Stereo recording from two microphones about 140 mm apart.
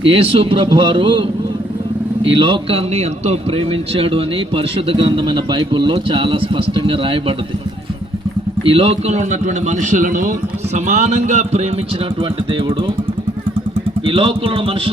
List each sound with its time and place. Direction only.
0.1 s a man's voice: 45° right (ahead or behind)
2.4 s a man's voice: 40° right (ahead or behind)
8.6 s a man's voice: 40° right (ahead or behind); by 10.3 s 70° right (ahead or behind)
10.8 s a man's voice: 55° right (ahead or behind)
14.0 s speech: 40° right (ahead or behind)